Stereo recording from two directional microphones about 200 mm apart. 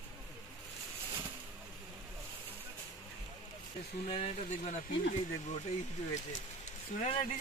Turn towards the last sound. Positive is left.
turn(degrees=35)  # may be behind; listen again after turning